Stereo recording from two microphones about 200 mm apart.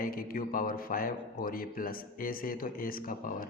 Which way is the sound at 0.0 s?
45° left (ahead or behind).